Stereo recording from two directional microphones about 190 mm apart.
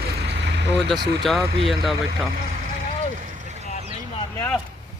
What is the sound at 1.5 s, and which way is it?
Speech, 30° right (ahead or behind).